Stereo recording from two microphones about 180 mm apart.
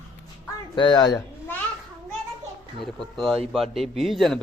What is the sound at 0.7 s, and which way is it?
Speech, 25° left (ahead or behind).